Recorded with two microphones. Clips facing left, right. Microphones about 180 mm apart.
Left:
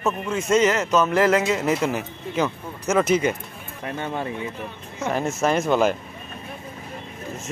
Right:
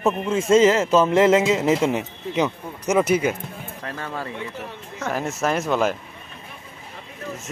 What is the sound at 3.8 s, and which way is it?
Speech, 20° left (ahead or behind).